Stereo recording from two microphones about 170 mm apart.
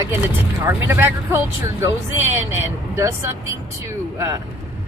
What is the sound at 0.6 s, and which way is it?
Speech, 15° right (ahead or behind).